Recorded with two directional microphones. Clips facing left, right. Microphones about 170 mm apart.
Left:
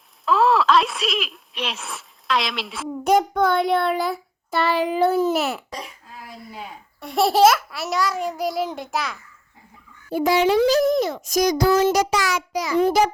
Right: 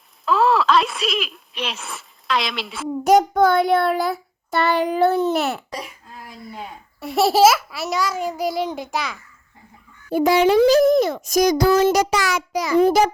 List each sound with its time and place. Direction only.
0.3 s a woman's voice: centre (ahead or behind)
7.0 s a child's voice: centre (ahead or behind)
10.1 s speech: 50° right (ahead or behind)